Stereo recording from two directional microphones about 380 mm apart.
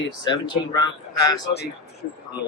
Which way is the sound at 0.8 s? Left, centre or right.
Centre.